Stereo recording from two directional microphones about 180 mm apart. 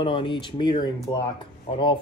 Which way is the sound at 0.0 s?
25° left (ahead or behind).